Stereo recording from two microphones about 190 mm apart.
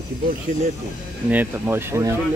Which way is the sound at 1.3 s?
10° right (ahead or behind).